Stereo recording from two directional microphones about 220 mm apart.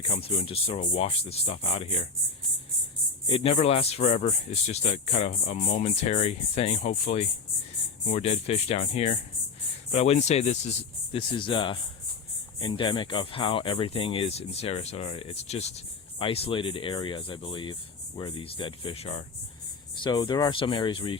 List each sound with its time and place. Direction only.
0.2 s speech: 25° left (ahead or behind)
3.2 s speech: 25° left (ahead or behind)